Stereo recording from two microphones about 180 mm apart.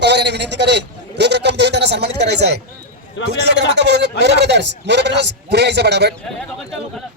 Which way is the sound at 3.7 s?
70° right (ahead or behind).